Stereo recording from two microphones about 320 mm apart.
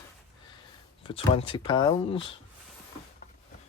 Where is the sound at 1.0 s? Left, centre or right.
Centre.